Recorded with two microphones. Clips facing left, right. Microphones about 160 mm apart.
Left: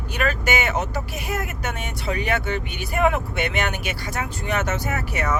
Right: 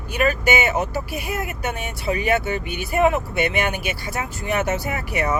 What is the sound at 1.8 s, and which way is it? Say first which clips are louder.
Speech: right 3 dB; 5° right (ahead or behind).